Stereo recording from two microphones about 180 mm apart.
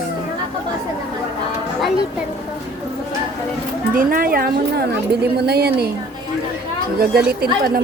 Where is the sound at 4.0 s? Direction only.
55° right (ahead or behind).